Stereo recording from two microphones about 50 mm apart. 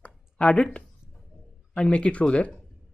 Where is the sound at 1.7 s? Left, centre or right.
Centre.